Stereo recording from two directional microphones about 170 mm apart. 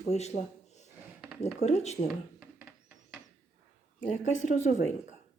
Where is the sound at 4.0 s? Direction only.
45° left (ahead or behind).